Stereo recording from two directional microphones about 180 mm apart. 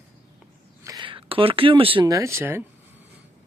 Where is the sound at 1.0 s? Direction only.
30° right (ahead or behind); by 2.7 s 15° right (ahead or behind).